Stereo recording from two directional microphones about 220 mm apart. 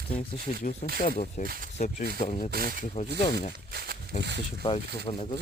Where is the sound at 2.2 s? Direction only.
30° left (ahead or behind).